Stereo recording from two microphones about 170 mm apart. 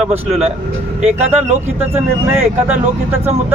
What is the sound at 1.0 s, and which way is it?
Speech, 40° right (ahead or behind).